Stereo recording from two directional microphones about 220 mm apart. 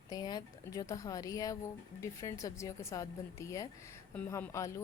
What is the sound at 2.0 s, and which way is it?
Speech, 15° left (ahead or behind).